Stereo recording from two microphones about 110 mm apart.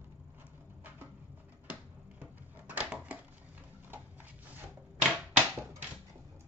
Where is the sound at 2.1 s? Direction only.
15° right (ahead or behind).